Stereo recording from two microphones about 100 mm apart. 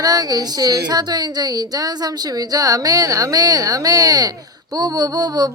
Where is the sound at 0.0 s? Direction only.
40° right (ahead or behind).